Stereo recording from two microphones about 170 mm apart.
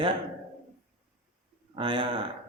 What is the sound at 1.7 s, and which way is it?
Speech, 30° right (ahead or behind).